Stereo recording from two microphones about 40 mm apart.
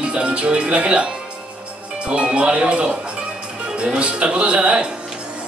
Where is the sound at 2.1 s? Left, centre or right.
Right.